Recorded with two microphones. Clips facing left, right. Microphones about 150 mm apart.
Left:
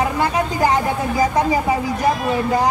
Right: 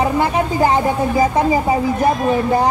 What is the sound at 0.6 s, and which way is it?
Speech, 25° right (ahead or behind).